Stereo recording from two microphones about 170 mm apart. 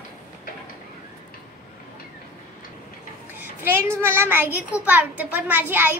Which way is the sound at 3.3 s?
15° right (ahead or behind).